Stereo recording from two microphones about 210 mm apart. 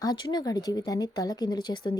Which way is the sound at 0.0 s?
20° left (ahead or behind).